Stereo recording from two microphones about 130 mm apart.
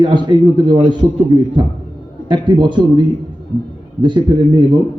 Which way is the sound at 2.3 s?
35° right (ahead or behind).